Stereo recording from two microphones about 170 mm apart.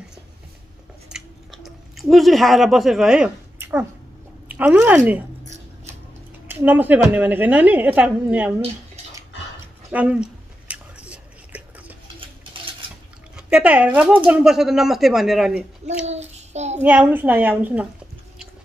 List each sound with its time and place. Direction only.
1.0 s chewing: centre (ahead or behind)
4.5 s a woman's voice: 5° right (ahead or behind)
6.4 s a woman's voice: 10° right (ahead or behind)
9.8 s speech: 10° right (ahead or behind)
10.7 s whispering: 5° right (ahead or behind)
13.4 s speech: 5° right (ahead or behind)
16.1 s child singing: 40° right (ahead or behind)
16.8 s a woman's voice: 10° right (ahead or behind)